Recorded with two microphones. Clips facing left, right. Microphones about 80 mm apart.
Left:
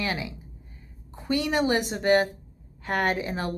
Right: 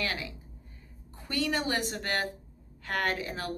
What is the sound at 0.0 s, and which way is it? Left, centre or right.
A woman's voice, centre.